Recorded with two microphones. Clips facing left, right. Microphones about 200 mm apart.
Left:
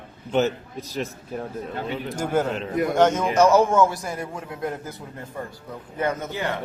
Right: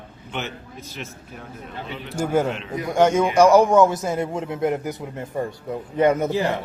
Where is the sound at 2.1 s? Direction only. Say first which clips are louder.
Right 3 dB; 10° right (ahead or behind).